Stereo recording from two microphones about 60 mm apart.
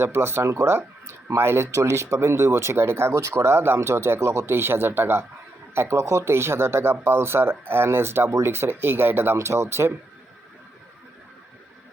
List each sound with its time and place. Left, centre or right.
0.0 s speech: right